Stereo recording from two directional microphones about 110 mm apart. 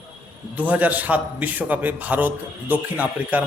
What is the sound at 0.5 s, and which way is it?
A man's voice, 15° right (ahead or behind).